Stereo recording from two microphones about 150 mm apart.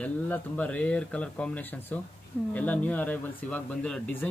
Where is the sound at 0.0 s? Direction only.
10° left (ahead or behind).